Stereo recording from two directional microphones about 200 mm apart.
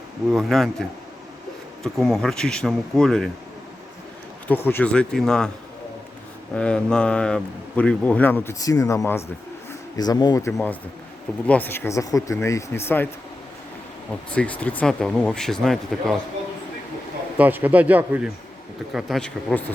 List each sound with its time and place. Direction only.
0.3 s speech: centre (ahead or behind)
4.4 s speech: 10° left (ahead or behind)
6.6 s speech: 5° left (ahead or behind)
14.3 s speech: 5° left (ahead or behind)
17.3 s speech: 10° right (ahead or behind)